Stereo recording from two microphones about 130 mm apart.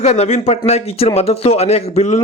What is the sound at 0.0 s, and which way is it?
A man's voice, 55° left (ahead or behind).